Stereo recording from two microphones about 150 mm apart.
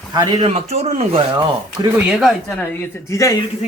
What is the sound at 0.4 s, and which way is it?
Speech, 45° right (ahead or behind).